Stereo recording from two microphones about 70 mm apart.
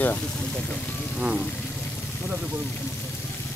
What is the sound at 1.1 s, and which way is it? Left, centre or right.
Speech, centre.